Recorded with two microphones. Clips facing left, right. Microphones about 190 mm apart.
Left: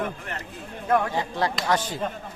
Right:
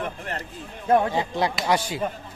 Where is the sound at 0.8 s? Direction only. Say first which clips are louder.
Right 3 dB; 25° right (ahead or behind); by 2.1 s 10° right (ahead or behind).